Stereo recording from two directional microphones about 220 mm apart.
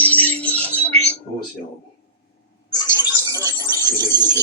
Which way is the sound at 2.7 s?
15° left (ahead or behind).